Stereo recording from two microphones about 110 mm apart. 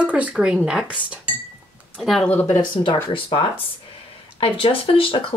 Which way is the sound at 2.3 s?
15° left (ahead or behind).